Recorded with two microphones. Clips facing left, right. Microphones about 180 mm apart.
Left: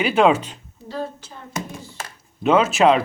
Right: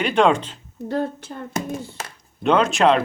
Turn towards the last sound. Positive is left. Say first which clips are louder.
# left 1 dB
turn(degrees=5)  # may be behind; listen again after turning